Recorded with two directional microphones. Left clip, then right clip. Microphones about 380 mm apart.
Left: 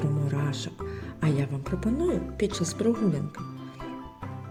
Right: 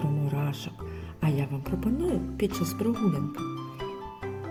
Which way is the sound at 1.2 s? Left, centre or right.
Centre.